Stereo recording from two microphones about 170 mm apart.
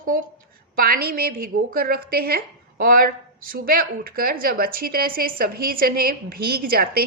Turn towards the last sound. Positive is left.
turn(degrees=-60)  # may be behind; listen again after turning